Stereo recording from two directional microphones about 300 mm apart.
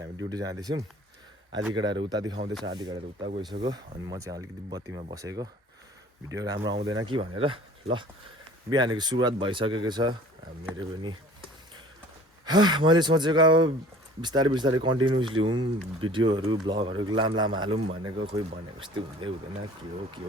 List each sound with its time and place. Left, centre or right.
0.0 s speech: centre
6.6 s speech: right
7.0 s speech: centre
12.5 s speech: centre